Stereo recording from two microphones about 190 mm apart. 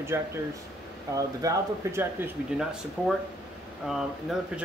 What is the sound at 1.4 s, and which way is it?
Speech, 15° right (ahead or behind).